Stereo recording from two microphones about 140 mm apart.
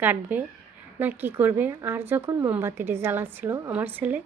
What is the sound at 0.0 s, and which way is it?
A woman's voice, 10° right (ahead or behind).